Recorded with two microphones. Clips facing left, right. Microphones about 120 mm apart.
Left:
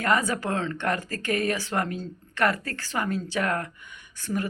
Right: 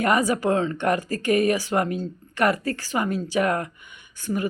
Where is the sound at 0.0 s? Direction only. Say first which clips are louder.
Right 4 dB; 15° right (ahead or behind).